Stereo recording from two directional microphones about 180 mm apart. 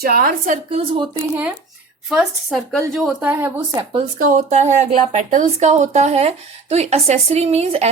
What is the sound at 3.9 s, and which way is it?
Speech, 35° right (ahead or behind).